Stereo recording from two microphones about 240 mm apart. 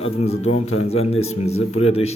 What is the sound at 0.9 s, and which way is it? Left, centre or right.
A man's voice, left.